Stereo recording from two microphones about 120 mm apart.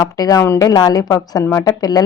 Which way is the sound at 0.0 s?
30° left (ahead or behind).